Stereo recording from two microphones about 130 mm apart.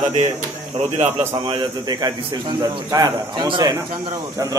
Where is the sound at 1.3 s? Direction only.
35° right (ahead or behind).